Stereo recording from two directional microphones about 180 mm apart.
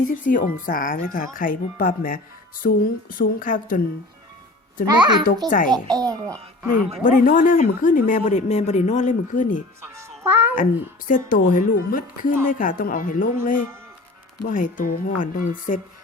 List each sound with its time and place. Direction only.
0.0 s speech: 50° left (ahead or behind)
4.9 s a child's voice: 25° right (ahead or behind)
5.5 s speech: 45° left (ahead or behind)
5.7 s a child's voice: 20° right (ahead or behind)
7.0 s speech: 50° left (ahead or behind)
9.8 s music: 15° right (ahead or behind)
11.1 s speech: 50° left (ahead or behind)